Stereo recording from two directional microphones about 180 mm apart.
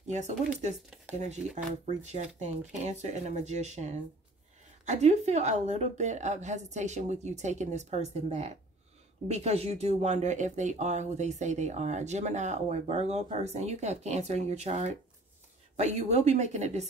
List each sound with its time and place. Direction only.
0.0 s speech: 40° right (ahead or behind)
2.7 s speech: 40° right (ahead or behind)